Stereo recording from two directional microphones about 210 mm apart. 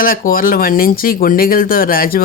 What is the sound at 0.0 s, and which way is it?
Speech, 40° left (ahead or behind).